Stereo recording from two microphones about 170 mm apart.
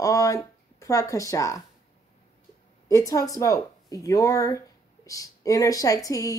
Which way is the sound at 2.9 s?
20° left (ahead or behind).